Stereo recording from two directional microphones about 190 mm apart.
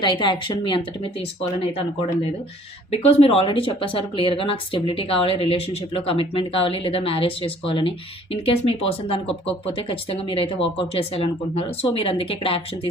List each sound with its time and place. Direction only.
0.0 s speech: 25° left (ahead or behind)
2.9 s speech: 30° left (ahead or behind)